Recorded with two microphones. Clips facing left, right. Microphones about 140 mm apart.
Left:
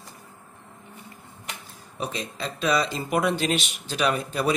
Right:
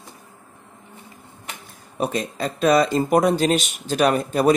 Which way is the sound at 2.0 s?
50° right (ahead or behind).